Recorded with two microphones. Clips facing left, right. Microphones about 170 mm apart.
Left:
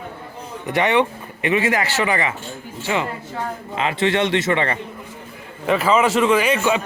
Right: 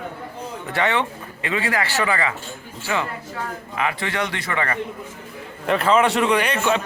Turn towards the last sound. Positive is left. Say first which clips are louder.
# left 2 dB
turn(degrees=5)  # may be behind; listen again after turning